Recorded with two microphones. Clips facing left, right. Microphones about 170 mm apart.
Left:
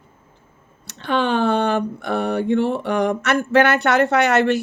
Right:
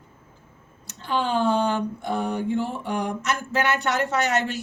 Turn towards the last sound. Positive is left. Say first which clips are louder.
# left 7 dB
turn(degrees=65)  # may be behind; listen again after turning